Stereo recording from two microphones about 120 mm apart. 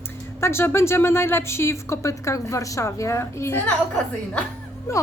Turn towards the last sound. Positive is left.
turn(degrees=25)  # may be behind; listen again after turning